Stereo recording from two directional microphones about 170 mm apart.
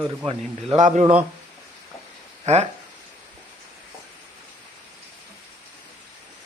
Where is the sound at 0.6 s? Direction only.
45° right (ahead or behind).